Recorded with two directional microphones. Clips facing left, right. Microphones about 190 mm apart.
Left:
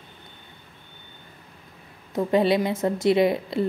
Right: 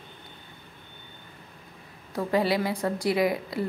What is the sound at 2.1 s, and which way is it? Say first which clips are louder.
Speech: left 4 dB; 20° left (ahead or behind).